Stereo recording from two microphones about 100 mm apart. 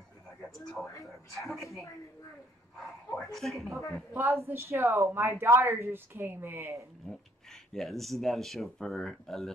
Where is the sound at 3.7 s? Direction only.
30° left (ahead or behind).